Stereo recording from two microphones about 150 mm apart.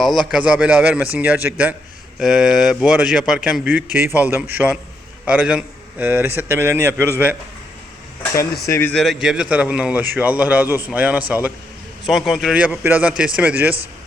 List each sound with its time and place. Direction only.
0.0 s a man's voice: centre (ahead or behind); by 7.1 s 15° right (ahead or behind)
8.6 s speech: 20° left (ahead or behind)
8.9 s a man's voice: centre (ahead or behind)
12.0 s a man's voice: centre (ahead or behind)